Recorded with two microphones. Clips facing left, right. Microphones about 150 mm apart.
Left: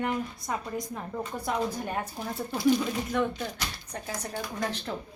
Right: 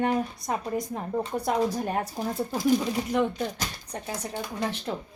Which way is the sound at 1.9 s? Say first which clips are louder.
Right 5 dB; 40° right (ahead or behind).